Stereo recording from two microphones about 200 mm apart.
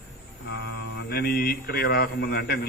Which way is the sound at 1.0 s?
50° left (ahead or behind).